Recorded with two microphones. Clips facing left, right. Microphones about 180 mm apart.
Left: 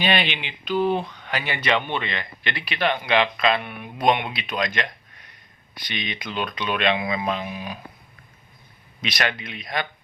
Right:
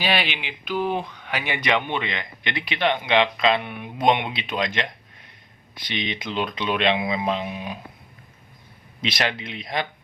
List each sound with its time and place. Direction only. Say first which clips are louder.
0.0 s speech: left 1 dB; 5° right (ahead or behind); by 7.8 s 25° right (ahead or behind)
9.0 s speech: right 1 dB; 25° right (ahead or behind)